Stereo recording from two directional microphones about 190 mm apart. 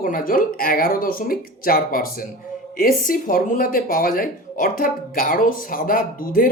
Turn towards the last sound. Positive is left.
turn(degrees=50)  # may be behind; listen again after turning